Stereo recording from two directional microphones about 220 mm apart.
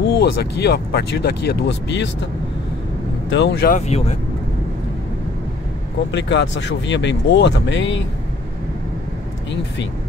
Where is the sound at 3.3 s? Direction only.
50° left (ahead or behind).